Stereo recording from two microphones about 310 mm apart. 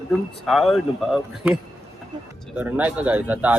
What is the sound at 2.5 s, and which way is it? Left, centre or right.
Speech, centre.